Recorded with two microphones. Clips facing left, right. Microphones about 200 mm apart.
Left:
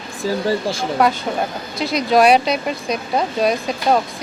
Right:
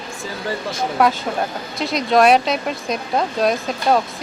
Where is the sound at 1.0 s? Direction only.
Centre (ahead or behind).